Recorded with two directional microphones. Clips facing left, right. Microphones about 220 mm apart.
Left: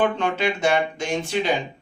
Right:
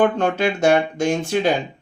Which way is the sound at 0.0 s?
45° right (ahead or behind).